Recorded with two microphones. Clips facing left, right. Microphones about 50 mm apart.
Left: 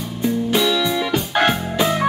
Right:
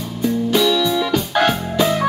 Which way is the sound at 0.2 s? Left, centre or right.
Centre.